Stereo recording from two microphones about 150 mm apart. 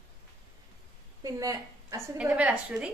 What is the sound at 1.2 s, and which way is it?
Speech, 25° right (ahead or behind).